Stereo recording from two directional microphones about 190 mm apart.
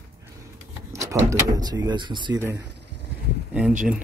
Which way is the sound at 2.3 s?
15° right (ahead or behind).